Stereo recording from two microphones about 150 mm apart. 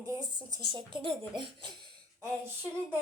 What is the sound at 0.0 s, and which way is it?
Speech, 25° right (ahead or behind).